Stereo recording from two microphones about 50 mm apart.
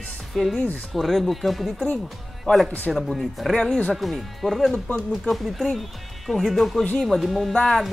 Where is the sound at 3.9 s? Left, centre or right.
Centre.